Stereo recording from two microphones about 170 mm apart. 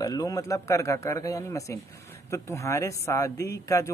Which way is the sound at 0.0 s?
20° left (ahead or behind).